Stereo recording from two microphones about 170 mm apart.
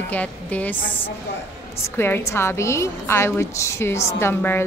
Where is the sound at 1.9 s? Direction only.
15° left (ahead or behind).